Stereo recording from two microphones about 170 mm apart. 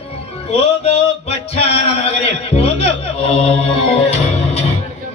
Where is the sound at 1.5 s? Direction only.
35° left (ahead or behind).